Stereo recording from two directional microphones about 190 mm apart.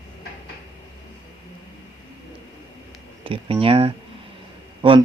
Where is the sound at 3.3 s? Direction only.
30° right (ahead or behind).